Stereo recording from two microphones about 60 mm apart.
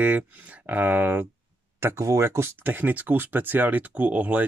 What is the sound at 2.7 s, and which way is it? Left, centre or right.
Speech, right.